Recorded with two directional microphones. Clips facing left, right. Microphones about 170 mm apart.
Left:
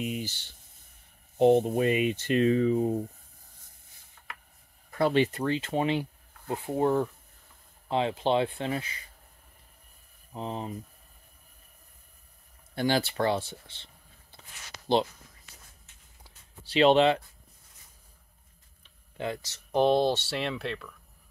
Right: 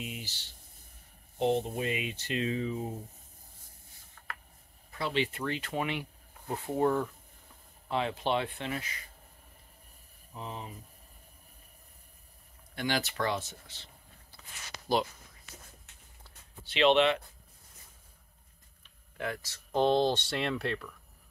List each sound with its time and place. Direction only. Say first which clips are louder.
0.0 s a sound: left 9 dB; 45° left (ahead or behind)
1.4 s speech: left 8 dB; 55° left (ahead or behind)
4.9 s speech: left 8 dB; 50° left (ahead or behind); by 6.0 s 30° left (ahead or behind)
6.5 s speech: left 2 dB; 20° left (ahead or behind)
10.3 s speech: left 6 dB; 35° left (ahead or behind)
12.7 s speech: left 6 dB; 30° left (ahead or behind)
16.6 s speech: left 4 dB; 35° left (ahead or behind)
18.8 s speech: left 3 dB; 25° left (ahead or behind); by 20.9 s centre (ahead or behind)